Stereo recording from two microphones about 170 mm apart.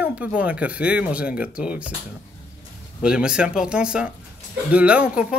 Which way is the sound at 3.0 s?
5° right (ahead or behind).